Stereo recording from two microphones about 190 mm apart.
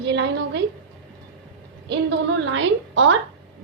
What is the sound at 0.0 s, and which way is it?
Speech, 70° right (ahead or behind).